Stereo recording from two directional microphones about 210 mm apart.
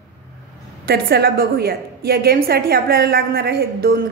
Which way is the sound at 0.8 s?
50° right (ahead or behind).